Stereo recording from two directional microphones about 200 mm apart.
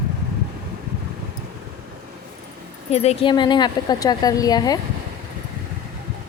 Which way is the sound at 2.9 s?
30° left (ahead or behind).